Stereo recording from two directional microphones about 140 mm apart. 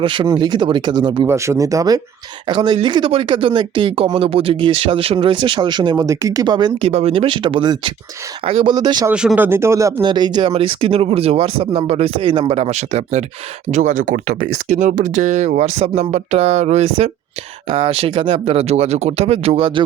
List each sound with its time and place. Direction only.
0.0 s speech: 35° right (ahead or behind)
1.3 s speech: 20° right (ahead or behind)
2.5 s speech: 35° right (ahead or behind)
6.9 s speech: 45° right (ahead or behind)
8.7 s speech: 30° right (ahead or behind)
9.1 s speech: 10° right (ahead or behind)
10.1 s speech: 30° right (ahead or behind); by 14.2 s 70° right (ahead or behind)
14.5 s speech: 60° right (ahead or behind); by 19.8 s 40° right (ahead or behind)